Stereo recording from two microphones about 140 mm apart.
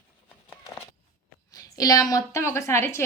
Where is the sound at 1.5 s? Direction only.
25° left (ahead or behind).